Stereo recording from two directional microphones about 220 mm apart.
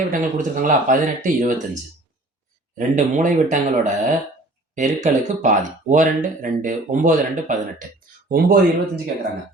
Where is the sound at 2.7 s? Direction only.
35° right (ahead or behind).